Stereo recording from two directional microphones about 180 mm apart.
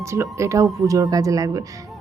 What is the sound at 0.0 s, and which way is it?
A woman's voice, 15° right (ahead or behind).